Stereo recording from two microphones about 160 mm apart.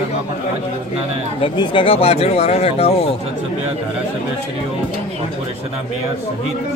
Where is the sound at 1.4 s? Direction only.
35° left (ahead or behind).